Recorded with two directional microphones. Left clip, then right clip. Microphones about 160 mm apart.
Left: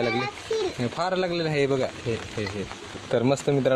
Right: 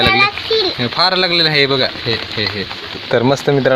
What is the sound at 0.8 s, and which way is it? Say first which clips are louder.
Speech: right 12 dB; centre (ahead or behind).